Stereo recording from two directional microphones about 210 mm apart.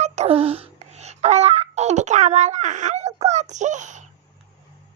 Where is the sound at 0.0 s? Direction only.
30° right (ahead or behind).